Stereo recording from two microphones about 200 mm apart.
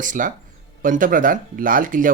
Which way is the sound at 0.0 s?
40° right (ahead or behind).